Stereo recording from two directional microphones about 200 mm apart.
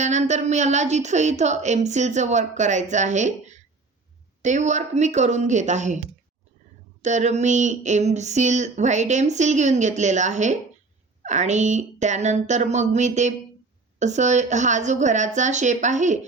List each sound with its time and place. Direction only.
0.0 s speech: 35° right (ahead or behind)